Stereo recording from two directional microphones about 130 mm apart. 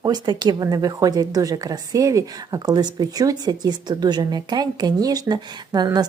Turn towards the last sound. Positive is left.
turn(degrees=-30)  # may be behind; listen again after turning